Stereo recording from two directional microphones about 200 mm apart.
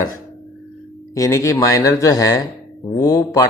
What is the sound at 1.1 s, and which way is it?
Speech, 15° left (ahead or behind).